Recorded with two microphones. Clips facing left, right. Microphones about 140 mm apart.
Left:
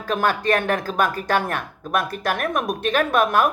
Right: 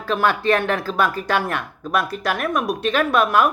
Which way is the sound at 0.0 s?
45° left (ahead or behind).